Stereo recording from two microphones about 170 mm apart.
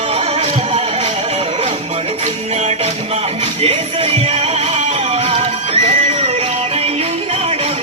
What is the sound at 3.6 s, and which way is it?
Music, 35° right (ahead or behind).